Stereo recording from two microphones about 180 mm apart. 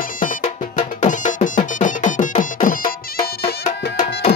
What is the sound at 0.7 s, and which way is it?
Music, 45° left (ahead or behind).